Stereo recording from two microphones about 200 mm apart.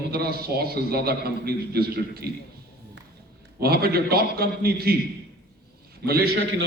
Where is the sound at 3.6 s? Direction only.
50° right (ahead or behind).